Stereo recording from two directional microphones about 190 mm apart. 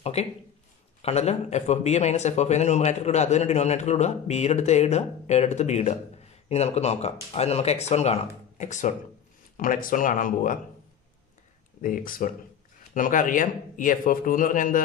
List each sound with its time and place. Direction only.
0.0 s a man's voice: 35° left (ahead or behind)
11.8 s a man's voice: 45° left (ahead or behind)